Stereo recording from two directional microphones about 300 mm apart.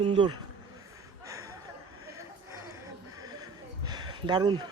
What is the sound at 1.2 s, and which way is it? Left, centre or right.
Chuckle, centre.